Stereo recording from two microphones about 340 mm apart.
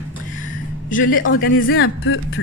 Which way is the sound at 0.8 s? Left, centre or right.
Left.